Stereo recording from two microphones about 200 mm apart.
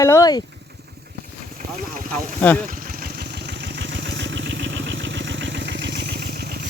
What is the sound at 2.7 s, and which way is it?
Vehicle, 45° right (ahead or behind).